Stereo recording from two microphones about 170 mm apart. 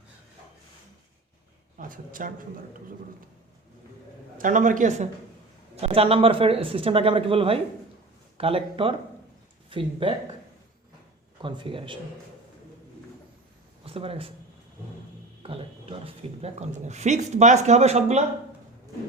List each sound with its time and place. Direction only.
1.8 s a man's voice: 55° right (ahead or behind)
4.4 s a man's voice: 50° right (ahead or behind)
5.7 s speech: 35° right (ahead or behind)
11.4 s speech: 30° right (ahead or behind)
13.8 s speech: 35° right (ahead or behind)
15.4 s speech: 35° right (ahead or behind)